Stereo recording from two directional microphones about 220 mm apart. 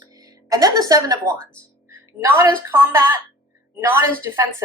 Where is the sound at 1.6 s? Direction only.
10° right (ahead or behind).